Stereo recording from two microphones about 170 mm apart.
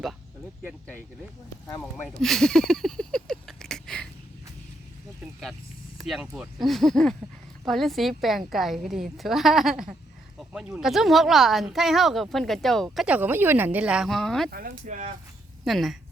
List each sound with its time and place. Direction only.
1.8 s a sound: centre (ahead or behind)
6.0 s speech: centre (ahead or behind)
14.5 s speech: 50° right (ahead or behind)
15.6 s speech: centre (ahead or behind)